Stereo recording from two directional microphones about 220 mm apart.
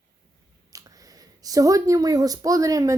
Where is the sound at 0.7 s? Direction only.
15° right (ahead or behind).